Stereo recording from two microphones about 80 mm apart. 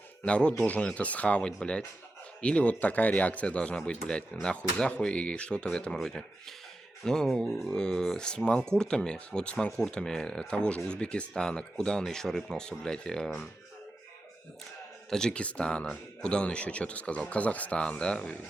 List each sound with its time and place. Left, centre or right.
0.3 s speech: centre
15.1 s speech: centre